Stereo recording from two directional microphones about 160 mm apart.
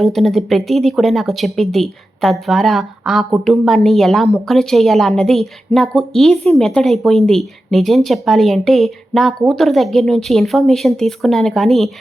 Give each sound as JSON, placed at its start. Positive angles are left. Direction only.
{"t": 0.0, "sound": "speech", "side_deg": 0}